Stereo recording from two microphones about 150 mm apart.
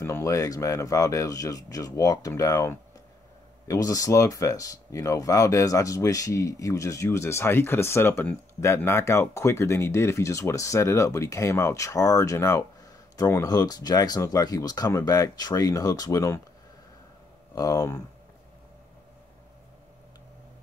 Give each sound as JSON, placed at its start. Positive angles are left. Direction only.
{"t": 0.0, "sound": "speech", "side_deg": 20}
{"t": 17.6, "sound": "speech", "side_deg": 25}